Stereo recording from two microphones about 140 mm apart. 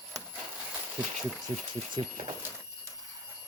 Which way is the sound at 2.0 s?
55° right (ahead or behind).